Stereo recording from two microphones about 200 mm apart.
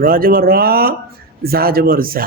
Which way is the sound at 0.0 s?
45° right (ahead or behind).